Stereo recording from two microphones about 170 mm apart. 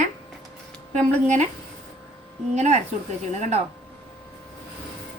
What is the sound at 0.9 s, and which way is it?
Speech, 45° right (ahead or behind).